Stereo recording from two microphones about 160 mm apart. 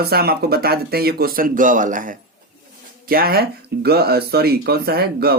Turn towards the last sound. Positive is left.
turn(degrees=-80)